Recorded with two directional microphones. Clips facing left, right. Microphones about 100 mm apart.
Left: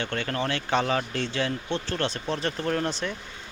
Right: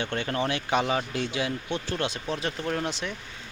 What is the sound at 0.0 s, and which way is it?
Speech, 20° right (ahead or behind).